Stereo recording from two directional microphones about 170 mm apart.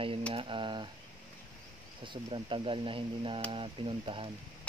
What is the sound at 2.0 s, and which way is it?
Speech, 30° right (ahead or behind).